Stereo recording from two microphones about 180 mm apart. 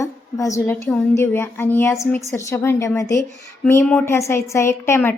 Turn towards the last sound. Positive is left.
turn(degrees=15)  # may be behind; listen again after turning